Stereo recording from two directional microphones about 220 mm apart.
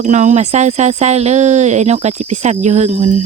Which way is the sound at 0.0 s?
35° right (ahead or behind).